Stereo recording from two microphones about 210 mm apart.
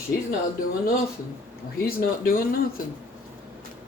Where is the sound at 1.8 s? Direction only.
45° left (ahead or behind).